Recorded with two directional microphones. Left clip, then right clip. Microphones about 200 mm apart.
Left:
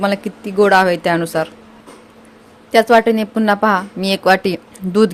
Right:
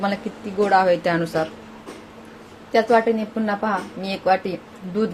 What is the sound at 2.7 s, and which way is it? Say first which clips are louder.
Speech: left 6 dB; 45° left (ahead or behind).